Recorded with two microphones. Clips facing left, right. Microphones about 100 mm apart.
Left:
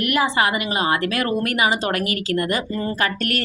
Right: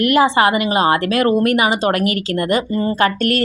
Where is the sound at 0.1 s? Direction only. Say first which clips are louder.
Right 5 dB; 30° right (ahead or behind).